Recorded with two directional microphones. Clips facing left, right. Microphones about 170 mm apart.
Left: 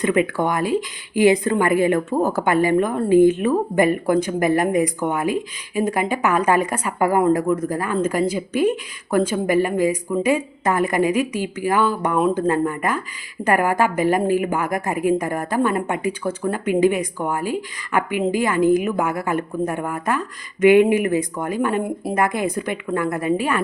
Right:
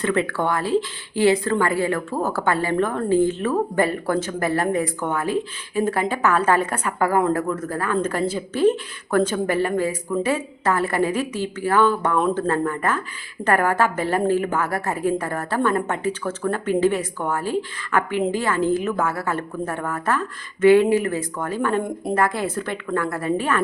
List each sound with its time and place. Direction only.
0.0 s a woman's voice: 15° left (ahead or behind)